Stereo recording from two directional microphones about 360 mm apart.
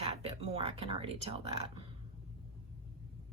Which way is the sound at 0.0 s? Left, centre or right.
Centre.